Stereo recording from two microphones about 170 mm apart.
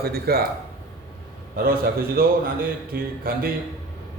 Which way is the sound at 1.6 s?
60° right (ahead or behind).